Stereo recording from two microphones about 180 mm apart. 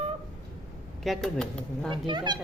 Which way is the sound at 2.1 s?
25° right (ahead or behind).